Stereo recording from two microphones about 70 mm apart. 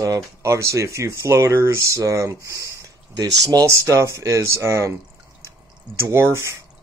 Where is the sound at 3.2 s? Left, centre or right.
Right.